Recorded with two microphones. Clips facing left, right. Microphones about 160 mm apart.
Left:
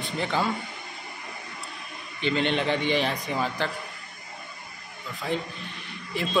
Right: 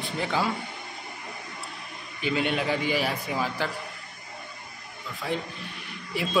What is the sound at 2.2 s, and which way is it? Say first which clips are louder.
A man's voice: left 1 dB; 10° right (ahead or behind).